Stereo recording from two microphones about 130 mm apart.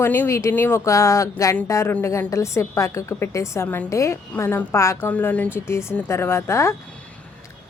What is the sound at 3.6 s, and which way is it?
A woman's voice, 10° left (ahead or behind).